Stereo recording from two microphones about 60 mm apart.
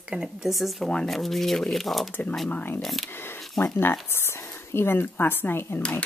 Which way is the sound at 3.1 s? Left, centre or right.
Left.